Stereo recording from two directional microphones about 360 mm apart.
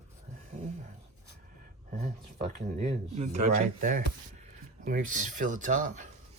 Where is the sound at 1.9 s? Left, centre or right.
Centre.